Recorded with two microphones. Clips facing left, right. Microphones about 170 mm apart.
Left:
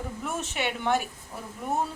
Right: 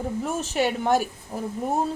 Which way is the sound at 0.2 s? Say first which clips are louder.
Right 6 dB; 35° right (ahead or behind).